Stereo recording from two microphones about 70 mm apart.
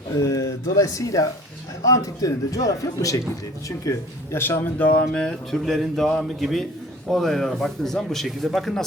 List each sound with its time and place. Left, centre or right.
0.1 s a man's voice: left
4.4 s speech: left
5.1 s speech: centre